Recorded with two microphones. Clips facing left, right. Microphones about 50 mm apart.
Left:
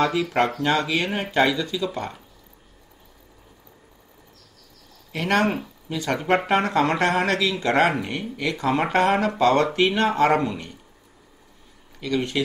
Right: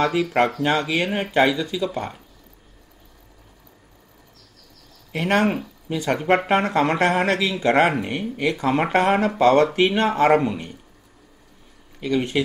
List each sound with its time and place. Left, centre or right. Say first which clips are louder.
0.0 s speech: right 2 dB; centre
5.1 s speech: right 1 dB; right
10.3 s speech: right 3 dB; centre
12.0 s speech: right 2 dB; right